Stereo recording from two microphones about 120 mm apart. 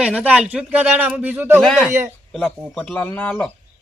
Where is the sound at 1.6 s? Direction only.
Centre (ahead or behind).